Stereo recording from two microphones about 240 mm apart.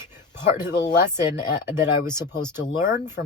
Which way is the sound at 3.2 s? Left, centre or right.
Left.